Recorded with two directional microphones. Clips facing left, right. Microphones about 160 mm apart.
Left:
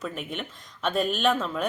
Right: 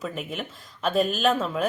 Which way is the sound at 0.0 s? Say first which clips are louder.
Right 1 dB; centre (ahead or behind).